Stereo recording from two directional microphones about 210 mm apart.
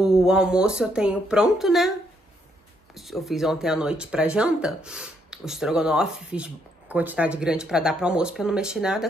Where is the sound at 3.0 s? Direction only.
Centre (ahead or behind).